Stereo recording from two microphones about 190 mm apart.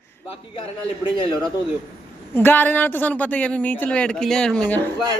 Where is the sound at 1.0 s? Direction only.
25° left (ahead or behind).